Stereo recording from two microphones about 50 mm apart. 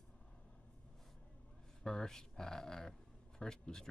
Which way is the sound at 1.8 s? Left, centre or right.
Centre.